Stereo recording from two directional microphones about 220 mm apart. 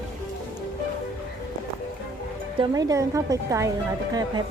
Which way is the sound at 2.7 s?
15° right (ahead or behind).